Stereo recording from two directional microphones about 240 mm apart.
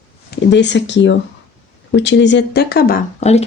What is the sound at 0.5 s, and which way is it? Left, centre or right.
Speech, left.